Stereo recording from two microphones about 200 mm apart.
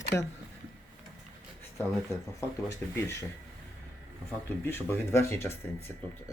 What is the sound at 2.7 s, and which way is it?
Speech, 15° left (ahead or behind).